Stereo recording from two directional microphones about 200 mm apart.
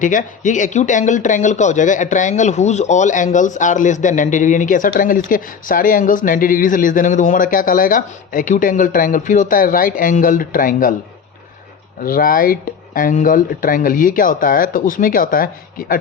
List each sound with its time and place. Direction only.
0.0 s speech: 40° left (ahead or behind)
12.0 s speech: 45° left (ahead or behind)